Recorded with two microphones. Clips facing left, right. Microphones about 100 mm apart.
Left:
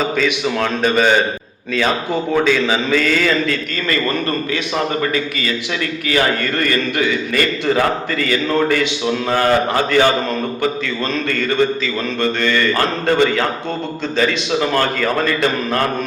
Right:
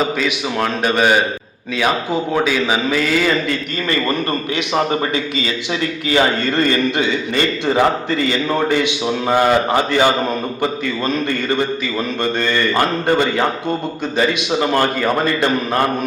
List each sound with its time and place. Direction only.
0.2 s a man's voice: 5° right (ahead or behind)
2.3 s a man's voice: 10° right (ahead or behind)